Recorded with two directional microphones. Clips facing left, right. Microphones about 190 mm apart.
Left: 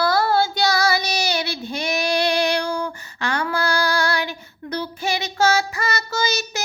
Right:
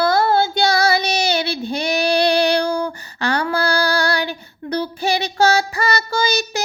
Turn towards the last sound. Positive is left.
turn(degrees=-30)  # may be behind; listen again after turning